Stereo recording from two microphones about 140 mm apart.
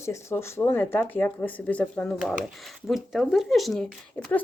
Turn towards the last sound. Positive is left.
turn(degrees=0)  # may be behind; listen again after turning